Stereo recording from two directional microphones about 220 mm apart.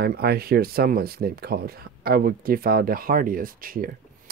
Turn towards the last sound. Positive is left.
turn(degrees=-40)  # may be behind; listen again after turning